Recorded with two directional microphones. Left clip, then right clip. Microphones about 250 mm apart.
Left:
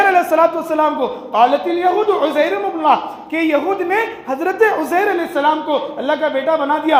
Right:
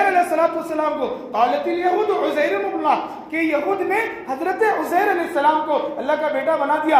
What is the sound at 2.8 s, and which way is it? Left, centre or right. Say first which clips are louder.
A man's voice: left 8 dB; left.